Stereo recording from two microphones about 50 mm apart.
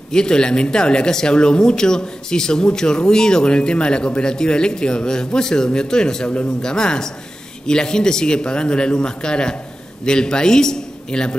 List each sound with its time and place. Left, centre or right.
0.1 s speech: centre